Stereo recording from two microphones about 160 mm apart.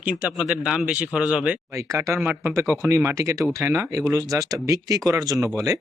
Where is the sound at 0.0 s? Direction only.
10° right (ahead or behind).